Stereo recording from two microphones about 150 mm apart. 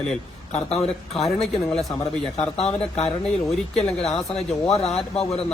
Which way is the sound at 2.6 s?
45° left (ahead or behind).